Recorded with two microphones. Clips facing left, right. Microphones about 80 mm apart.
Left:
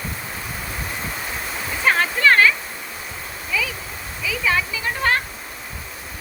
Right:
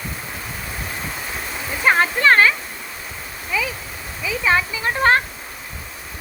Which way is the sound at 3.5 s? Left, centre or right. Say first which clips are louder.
Right 2 dB; right.